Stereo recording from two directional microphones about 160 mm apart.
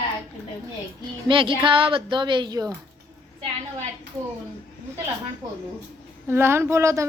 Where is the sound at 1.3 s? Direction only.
30° right (ahead or behind).